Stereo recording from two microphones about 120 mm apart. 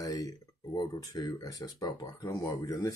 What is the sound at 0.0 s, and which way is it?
Speech, 30° left (ahead or behind).